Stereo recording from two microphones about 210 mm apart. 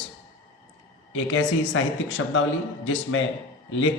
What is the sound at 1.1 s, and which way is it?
A woman's voice, 70° left (ahead or behind).